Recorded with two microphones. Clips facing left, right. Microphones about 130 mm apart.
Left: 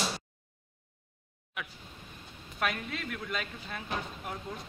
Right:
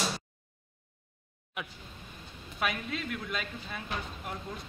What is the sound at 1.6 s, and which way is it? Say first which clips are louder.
Speech: right 1 dB; 20° right (ahead or behind).